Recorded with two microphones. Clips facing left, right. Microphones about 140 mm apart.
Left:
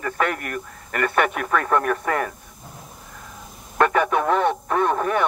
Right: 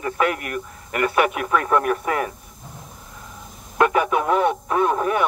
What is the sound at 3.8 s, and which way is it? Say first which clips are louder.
Speech: even; 5° right (ahead or behind).